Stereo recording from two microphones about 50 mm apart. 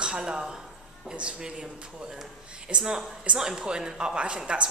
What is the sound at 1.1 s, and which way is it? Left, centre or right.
A woman's voice, right.